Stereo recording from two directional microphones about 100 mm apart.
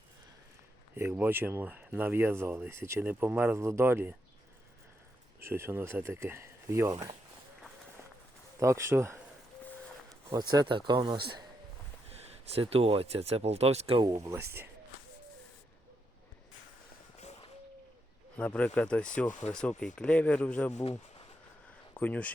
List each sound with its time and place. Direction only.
1.2 s speech: 20° right (ahead or behind)
5.4 s speech: 25° right (ahead or behind)
8.5 s speech: 30° right (ahead or behind)
10.2 s a man's voice: 45° right (ahead or behind)
12.0 s speech: 85° right
14.0 s speech: 35° right (ahead or behind)
17.2 s a sound: 90° left
18.3 s speech: 10° left (ahead or behind)
21.9 s speech: 15° left (ahead or behind)